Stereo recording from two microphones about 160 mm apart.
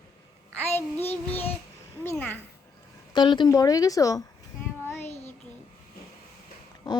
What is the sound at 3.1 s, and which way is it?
Speech, 30° left (ahead or behind).